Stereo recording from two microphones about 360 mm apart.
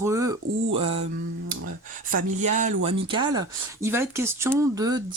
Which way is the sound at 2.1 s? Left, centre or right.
Centre.